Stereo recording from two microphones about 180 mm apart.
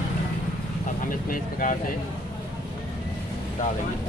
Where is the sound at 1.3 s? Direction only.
50° left (ahead or behind).